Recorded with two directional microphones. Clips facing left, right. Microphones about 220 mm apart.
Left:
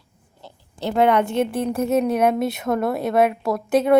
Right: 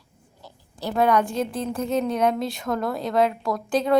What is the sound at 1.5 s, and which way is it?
Speech, 65° left (ahead or behind).